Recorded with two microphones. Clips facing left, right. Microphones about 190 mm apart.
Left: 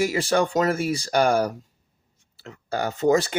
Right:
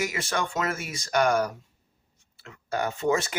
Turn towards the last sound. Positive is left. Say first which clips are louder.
# left 5 dB
turn(degrees=35)  # may be behind; listen again after turning